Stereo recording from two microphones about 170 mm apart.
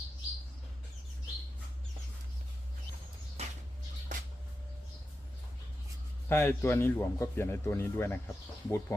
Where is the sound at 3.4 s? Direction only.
40° right (ahead or behind).